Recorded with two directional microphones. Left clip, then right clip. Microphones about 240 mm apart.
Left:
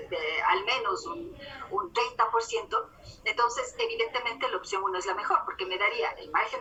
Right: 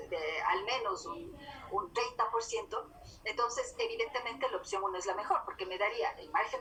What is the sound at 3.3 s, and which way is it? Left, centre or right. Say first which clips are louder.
A woman's voice: left 7 dB; left.